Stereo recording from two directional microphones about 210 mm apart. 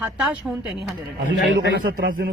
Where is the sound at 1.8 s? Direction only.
45° right (ahead or behind).